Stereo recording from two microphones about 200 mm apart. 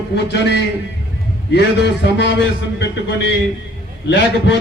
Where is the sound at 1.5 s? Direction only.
55° left (ahead or behind).